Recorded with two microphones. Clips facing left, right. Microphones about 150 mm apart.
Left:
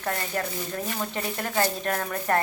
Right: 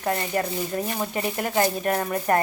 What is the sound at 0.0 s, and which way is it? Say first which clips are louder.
Speech: right 4 dB; 15° right (ahead or behind).